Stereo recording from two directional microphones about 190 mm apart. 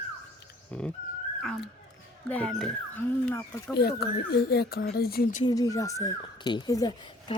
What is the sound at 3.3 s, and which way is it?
Speech, 15° left (ahead or behind).